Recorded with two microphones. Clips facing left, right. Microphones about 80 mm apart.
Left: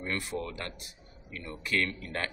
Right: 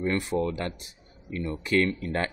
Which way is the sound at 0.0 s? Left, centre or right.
Right.